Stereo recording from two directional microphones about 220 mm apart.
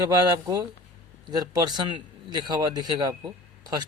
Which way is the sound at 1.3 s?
15° right (ahead or behind).